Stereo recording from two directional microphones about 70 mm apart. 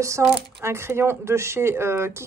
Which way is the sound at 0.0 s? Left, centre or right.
Right.